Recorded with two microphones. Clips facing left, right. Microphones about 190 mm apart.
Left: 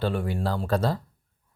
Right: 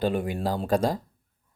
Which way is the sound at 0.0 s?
15° right (ahead or behind).